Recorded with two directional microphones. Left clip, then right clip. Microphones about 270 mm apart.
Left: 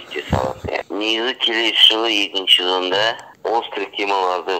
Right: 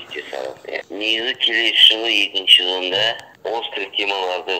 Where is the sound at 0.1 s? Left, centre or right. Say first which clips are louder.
Left 6 dB; left.